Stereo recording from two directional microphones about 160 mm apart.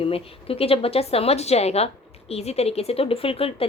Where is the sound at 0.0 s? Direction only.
35° left (ahead or behind).